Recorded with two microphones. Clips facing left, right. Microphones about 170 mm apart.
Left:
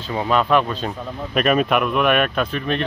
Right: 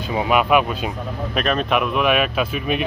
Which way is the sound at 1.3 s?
5° left (ahead or behind).